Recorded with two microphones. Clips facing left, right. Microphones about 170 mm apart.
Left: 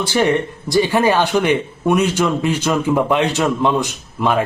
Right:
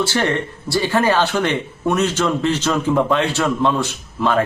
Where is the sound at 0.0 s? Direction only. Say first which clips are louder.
Left 3 dB; 15° left (ahead or behind).